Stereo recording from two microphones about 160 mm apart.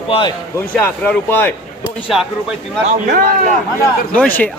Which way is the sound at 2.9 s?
50° right (ahead or behind).